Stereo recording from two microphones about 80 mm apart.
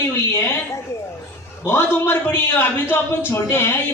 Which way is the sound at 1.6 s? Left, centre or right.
Left.